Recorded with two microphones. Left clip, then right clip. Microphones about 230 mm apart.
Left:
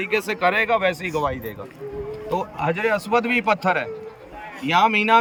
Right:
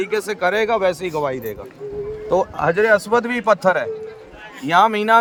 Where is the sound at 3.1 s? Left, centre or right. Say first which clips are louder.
Right 3 dB; right.